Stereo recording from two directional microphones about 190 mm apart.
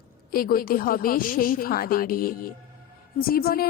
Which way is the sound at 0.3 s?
50° left (ahead or behind).